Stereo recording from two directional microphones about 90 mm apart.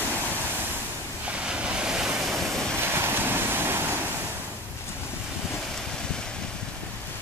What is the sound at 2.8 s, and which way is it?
Waves, 25° right (ahead or behind).